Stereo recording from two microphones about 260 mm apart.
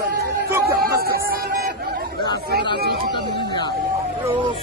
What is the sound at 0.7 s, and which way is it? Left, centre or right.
Music, right.